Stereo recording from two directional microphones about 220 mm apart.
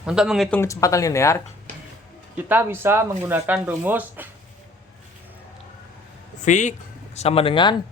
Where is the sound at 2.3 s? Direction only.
10° right (ahead or behind).